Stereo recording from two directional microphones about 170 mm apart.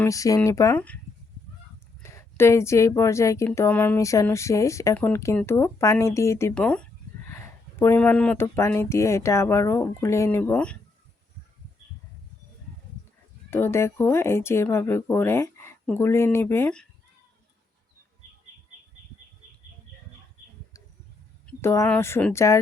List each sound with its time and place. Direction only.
0.0 s speech: 20° left (ahead or behind)
2.0 s speech: 15° left (ahead or behind)
6.5 s speech: 5° left (ahead or behind)
13.5 s speech: 15° left (ahead or behind)
21.6 s speech: 15° left (ahead or behind)